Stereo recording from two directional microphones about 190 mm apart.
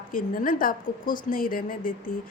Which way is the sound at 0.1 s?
45° left (ahead or behind).